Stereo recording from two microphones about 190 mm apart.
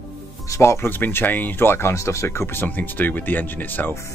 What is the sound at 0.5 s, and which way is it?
Speech, 15° left (ahead or behind).